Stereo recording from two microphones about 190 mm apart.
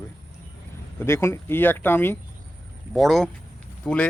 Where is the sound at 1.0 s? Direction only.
15° left (ahead or behind).